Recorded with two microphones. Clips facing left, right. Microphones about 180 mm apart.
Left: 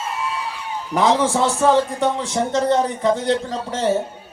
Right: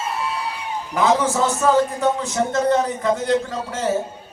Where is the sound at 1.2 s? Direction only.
30° left (ahead or behind).